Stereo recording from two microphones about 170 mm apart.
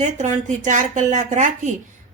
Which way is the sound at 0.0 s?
45° right (ahead or behind).